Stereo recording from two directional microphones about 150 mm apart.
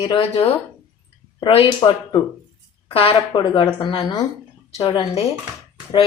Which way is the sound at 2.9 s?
35° left (ahead or behind).